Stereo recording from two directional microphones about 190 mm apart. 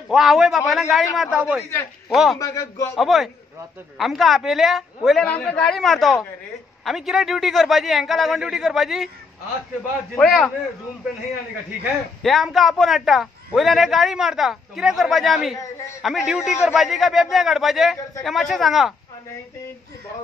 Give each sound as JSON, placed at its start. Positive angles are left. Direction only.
{"t": 0.1, "sound": "a man's voice", "side_deg": 0}
{"t": 2.3, "sound": "speech", "side_deg": 15}
{"t": 3.0, "sound": "a man's voice", "side_deg": 0}
{"t": 10.1, "sound": "a man's voice", "side_deg": 5}
{"t": 12.2, "sound": "a man's voice", "side_deg": 0}